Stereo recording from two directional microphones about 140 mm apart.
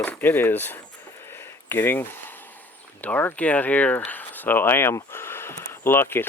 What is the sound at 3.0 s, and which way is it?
Speech, 10° left (ahead or behind).